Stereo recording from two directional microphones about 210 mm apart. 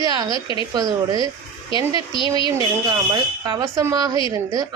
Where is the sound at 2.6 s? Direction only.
20° right (ahead or behind).